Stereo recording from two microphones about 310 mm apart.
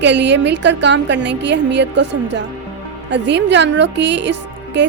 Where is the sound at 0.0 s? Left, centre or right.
Right.